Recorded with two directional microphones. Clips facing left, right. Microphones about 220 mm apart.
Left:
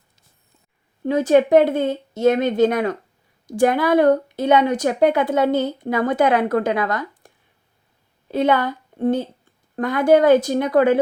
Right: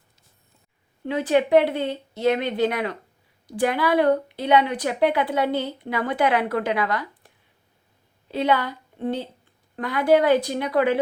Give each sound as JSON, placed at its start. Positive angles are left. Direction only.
{"t": 1.0, "sound": "a woman's voice", "side_deg": 45}
{"t": 8.3, "sound": "a woman's voice", "side_deg": 50}